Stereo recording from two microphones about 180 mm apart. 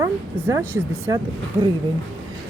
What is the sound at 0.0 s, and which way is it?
Speech, 15° right (ahead or behind).